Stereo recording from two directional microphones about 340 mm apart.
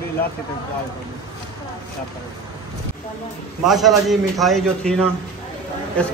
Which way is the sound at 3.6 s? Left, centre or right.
Centre.